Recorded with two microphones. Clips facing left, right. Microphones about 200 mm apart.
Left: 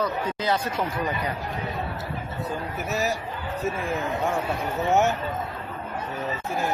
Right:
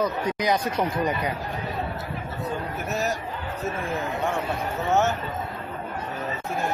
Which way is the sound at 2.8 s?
Centre (ahead or behind).